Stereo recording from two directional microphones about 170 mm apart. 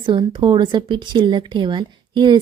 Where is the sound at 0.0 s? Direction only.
30° right (ahead or behind).